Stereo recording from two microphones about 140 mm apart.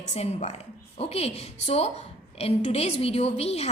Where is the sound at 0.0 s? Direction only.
55° left (ahead or behind).